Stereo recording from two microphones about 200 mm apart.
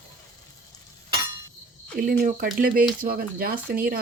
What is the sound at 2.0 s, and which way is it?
Speech, 45° right (ahead or behind).